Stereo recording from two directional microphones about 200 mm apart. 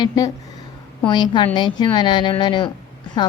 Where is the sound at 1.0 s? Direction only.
20° left (ahead or behind).